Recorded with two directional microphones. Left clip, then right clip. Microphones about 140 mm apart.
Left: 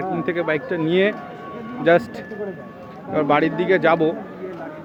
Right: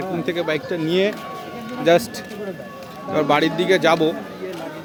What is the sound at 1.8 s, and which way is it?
Speech, 10° right (ahead or behind).